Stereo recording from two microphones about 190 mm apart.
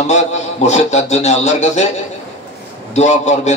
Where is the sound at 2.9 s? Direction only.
35° left (ahead or behind).